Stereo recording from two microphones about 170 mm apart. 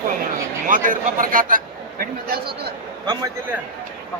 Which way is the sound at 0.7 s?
55° right (ahead or behind).